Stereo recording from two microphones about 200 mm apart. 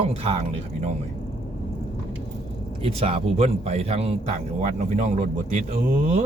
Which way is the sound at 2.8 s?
30° right (ahead or behind).